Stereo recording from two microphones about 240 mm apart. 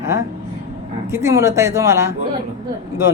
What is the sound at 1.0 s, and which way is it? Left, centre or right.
A woman's voice, centre.